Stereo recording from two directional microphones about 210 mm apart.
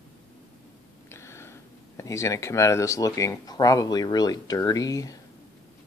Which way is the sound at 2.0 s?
15° left (ahead or behind).